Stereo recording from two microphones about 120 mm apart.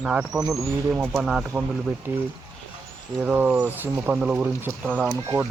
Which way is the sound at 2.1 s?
15° right (ahead or behind).